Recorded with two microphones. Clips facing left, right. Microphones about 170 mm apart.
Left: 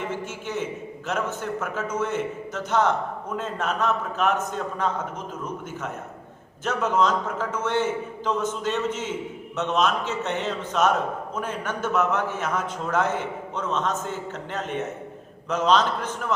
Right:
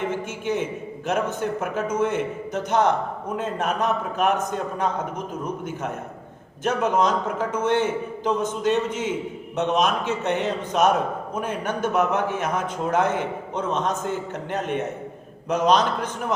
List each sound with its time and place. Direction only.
0.0 s a man's voice: 15° right (ahead or behind)
6.7 s a man's voice: 15° right (ahead or behind)